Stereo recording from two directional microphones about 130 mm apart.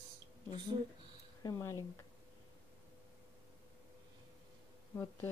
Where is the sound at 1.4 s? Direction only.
30° left (ahead or behind).